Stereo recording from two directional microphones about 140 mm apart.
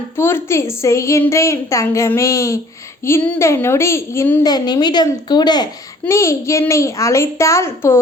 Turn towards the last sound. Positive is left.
turn(degrees=20)  # may be behind; listen again after turning